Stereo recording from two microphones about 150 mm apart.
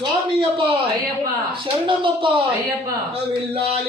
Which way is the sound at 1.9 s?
35° right (ahead or behind).